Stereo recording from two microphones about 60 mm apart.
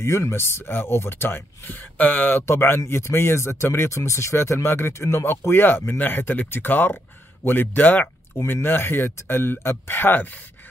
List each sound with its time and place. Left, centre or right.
0.0 s speech: left